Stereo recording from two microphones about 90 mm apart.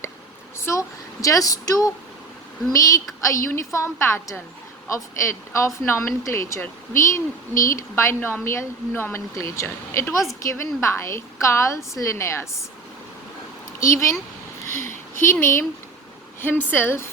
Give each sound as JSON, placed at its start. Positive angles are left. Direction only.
{"t": 0.6, "sound": "speech", "side_deg": 35}
{"t": 13.7, "sound": "speech", "side_deg": 35}
{"t": 16.7, "sound": "speech", "side_deg": 25}